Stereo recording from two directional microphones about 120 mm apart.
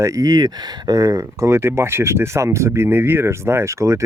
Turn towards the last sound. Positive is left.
turn(degrees=-25)  # may be behind; listen again after turning